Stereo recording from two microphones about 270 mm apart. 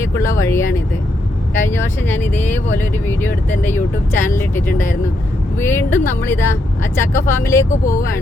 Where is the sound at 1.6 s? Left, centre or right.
Centre.